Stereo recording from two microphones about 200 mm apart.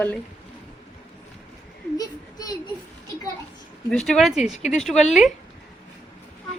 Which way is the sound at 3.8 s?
Centre (ahead or behind).